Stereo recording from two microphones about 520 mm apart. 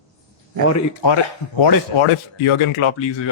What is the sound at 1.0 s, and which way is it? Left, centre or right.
Speech, left.